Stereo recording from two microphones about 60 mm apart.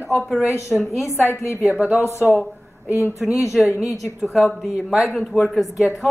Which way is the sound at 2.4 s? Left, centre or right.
Right.